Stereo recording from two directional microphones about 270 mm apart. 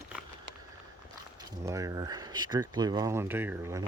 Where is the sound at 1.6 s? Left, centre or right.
Centre.